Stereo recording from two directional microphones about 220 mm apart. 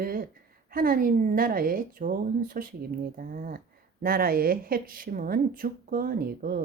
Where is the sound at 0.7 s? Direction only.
40° right (ahead or behind).